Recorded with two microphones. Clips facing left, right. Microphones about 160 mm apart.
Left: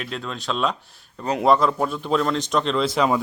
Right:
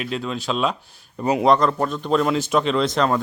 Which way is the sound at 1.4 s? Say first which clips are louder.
Even; 5° left (ahead or behind).